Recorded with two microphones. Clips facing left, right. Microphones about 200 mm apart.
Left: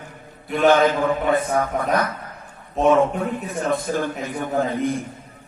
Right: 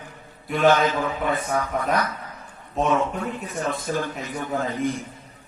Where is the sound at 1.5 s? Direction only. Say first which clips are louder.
Left 3 dB; 55° left (ahead or behind).